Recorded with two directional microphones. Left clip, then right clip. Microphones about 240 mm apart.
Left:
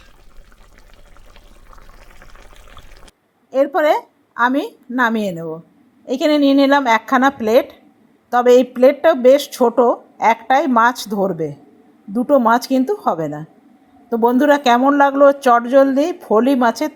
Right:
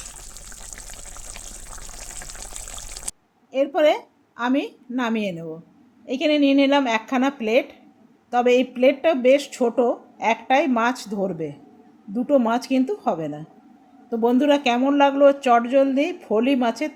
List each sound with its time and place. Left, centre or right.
0.8 s water: centre
2.7 s a sound: centre
3.5 s a woman's voice: centre